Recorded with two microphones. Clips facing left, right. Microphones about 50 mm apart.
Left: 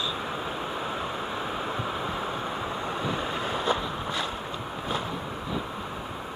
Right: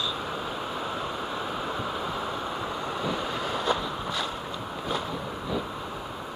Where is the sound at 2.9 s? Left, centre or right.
Left.